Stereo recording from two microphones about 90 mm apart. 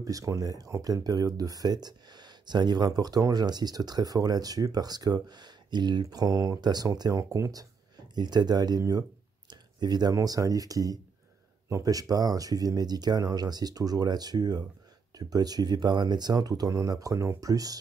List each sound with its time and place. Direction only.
0.0 s speech: 40° right (ahead or behind)
8.1 s speech: 55° right (ahead or behind)
9.5 s a sound: 50° right (ahead or behind)
10.1 s speech: 40° right (ahead or behind)